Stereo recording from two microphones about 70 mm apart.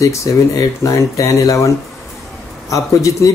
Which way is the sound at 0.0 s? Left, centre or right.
Left.